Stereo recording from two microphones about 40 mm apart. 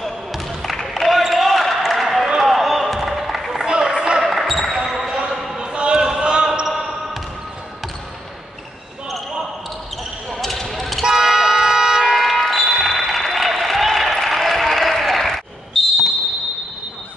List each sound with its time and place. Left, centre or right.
0.0 s basketball bounce: centre
3.6 s run: right
4.2 s basketball bounce: centre
4.7 s basketball bounce: centre
5.3 s basketball bounce: centre
5.6 s basketball bounce: right
6.6 s basketball bounce: centre
10.3 s basketball bounce: centre
11.1 s a sound: centre
12.2 s applause: centre